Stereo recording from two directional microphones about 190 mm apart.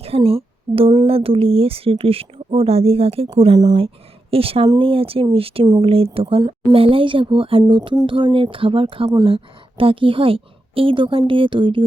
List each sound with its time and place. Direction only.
0.0 s speech: 30° right (ahead or behind)